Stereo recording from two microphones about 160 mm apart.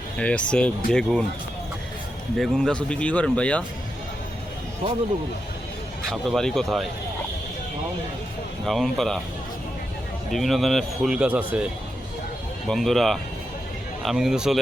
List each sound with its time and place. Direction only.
0.2 s speech: 5° left (ahead or behind)
2.4 s speech: 5° left (ahead or behind)
6.1 s speech: centre (ahead or behind)
8.6 s speech: centre (ahead or behind)
10.3 s speech: centre (ahead or behind)
12.6 s speech: centre (ahead or behind)